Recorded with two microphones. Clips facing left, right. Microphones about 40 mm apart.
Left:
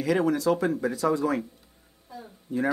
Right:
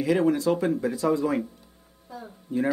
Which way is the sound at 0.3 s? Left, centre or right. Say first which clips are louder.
Right 1 dB; left.